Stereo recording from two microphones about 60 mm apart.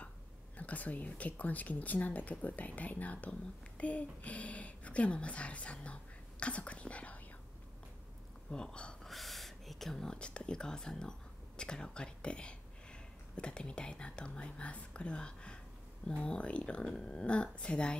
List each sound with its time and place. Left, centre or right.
0.6 s speech: left
8.5 s speech: centre
9.0 s speech: centre